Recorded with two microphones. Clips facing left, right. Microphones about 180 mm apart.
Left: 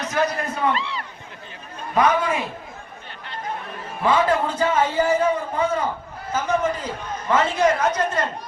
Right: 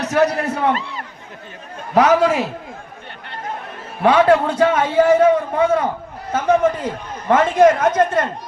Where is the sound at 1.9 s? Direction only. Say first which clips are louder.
Right 6 dB; 75° right (ahead or behind).